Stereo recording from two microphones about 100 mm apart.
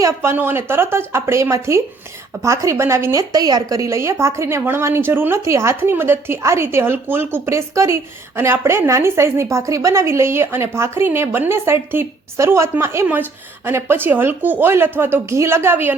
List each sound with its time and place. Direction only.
0.0 s speech: 25° right (ahead or behind)